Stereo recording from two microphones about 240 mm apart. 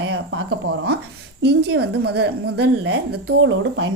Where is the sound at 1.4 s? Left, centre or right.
Right.